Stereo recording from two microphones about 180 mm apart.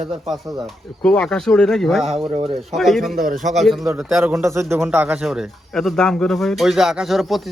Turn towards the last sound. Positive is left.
turn(degrees=0)  # may be behind; listen again after turning